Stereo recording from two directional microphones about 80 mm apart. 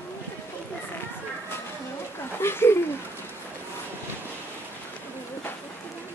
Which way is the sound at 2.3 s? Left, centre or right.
Left.